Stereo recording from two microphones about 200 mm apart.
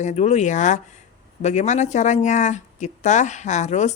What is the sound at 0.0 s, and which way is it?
Speech, 35° left (ahead or behind).